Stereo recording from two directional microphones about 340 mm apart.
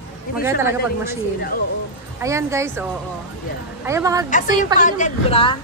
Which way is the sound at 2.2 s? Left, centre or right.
Centre.